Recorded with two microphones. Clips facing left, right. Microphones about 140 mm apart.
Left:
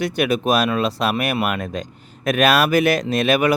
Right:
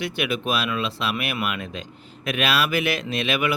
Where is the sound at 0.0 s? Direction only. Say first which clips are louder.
Left 6 dB; 40° left (ahead or behind).